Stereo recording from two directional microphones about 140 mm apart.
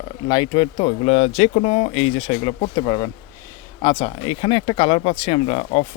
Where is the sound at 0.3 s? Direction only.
30° left (ahead or behind).